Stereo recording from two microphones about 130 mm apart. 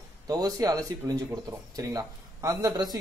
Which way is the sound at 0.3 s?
30° right (ahead or behind).